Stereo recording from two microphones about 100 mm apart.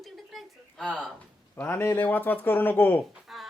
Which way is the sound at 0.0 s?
Centre (ahead or behind).